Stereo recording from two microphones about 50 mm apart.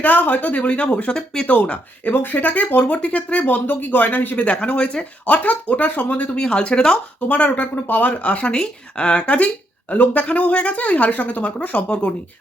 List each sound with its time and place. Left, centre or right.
0.0 s speech: left
1.1 s speech: centre
1.5 s speech: left
4.4 s speech: left
6.3 s speech: centre
7.3 s speech: left